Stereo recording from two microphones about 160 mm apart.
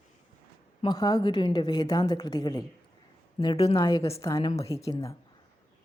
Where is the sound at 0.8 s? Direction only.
25° left (ahead or behind).